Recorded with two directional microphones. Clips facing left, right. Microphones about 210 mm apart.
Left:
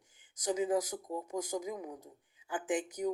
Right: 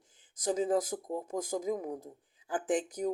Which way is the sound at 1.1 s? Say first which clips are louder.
Right 1 dB; 50° right (ahead or behind).